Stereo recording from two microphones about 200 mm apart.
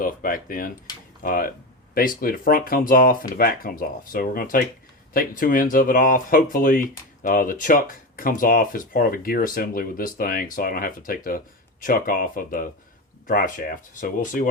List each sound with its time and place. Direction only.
0.0 s speech: 45° left (ahead or behind)